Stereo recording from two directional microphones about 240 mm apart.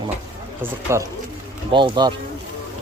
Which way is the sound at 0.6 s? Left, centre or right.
Centre.